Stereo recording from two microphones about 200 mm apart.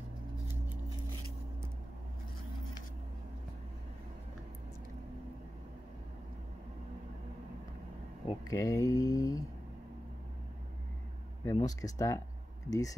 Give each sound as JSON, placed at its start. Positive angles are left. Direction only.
{"t": 8.3, "sound": "speech", "side_deg": 15}
{"t": 11.5, "sound": "speech", "side_deg": 15}